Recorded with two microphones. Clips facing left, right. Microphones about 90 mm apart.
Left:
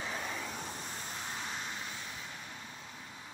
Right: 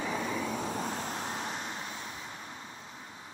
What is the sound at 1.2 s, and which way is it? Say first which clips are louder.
Vehicle: right 4 dB; 40° right (ahead or behind).